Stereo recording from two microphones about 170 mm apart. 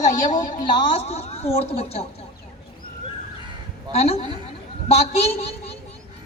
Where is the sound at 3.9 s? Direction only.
35° left (ahead or behind).